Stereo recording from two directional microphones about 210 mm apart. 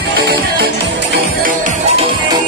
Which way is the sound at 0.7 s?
45° right (ahead or behind).